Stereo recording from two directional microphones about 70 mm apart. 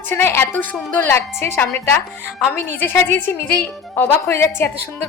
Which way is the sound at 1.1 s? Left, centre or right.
Left.